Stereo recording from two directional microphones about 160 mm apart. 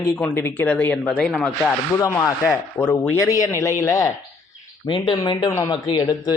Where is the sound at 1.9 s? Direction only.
15° left (ahead or behind).